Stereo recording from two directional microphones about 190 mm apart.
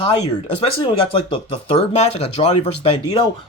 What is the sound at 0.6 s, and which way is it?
Speech, 30° left (ahead or behind).